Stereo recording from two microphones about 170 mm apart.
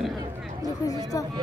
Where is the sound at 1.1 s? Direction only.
20° left (ahead or behind).